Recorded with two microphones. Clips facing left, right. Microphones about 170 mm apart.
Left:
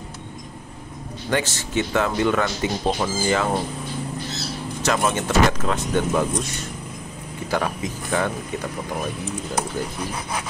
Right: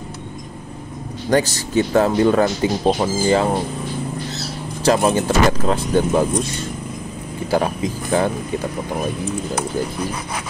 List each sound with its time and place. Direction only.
1.3 s speech: 35° right (ahead or behind)
4.8 s speech: 30° right (ahead or behind)
7.5 s speech: 30° right (ahead or behind)